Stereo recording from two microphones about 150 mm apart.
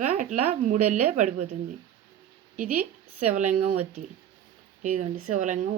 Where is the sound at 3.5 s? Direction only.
70° right (ahead or behind).